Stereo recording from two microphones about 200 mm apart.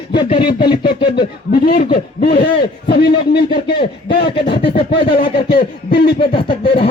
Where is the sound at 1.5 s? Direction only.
50° left (ahead or behind).